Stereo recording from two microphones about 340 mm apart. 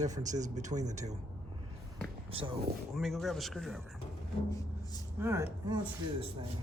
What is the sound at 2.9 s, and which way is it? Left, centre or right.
Speech, centre.